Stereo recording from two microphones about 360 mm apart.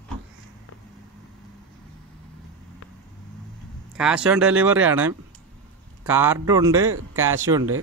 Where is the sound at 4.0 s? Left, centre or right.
Centre.